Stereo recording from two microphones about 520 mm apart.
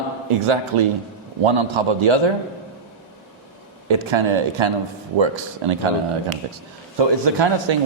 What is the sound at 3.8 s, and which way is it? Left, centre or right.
Speech, right.